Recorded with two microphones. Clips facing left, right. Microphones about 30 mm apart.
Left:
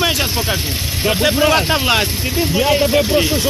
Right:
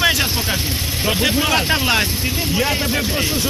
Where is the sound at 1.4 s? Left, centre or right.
Centre.